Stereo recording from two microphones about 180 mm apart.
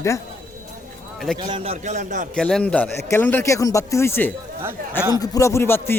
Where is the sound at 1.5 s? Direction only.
35° right (ahead or behind).